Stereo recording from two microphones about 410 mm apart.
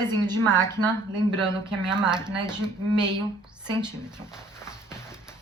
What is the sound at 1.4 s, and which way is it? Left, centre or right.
Speech, centre.